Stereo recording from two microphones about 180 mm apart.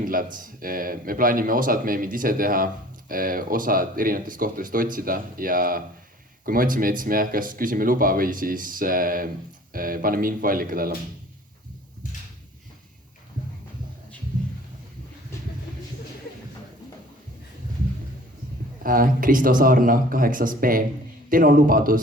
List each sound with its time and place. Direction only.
0.0 s speech: 50° right (ahead or behind)
18.8 s speech: 50° right (ahead or behind)